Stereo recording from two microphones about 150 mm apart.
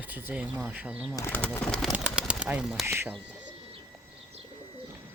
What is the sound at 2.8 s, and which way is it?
Speech, 15° right (ahead or behind).